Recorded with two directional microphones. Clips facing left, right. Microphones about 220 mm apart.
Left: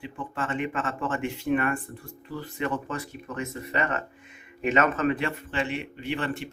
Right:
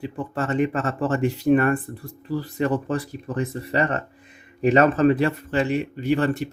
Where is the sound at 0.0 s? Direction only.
40° right (ahead or behind).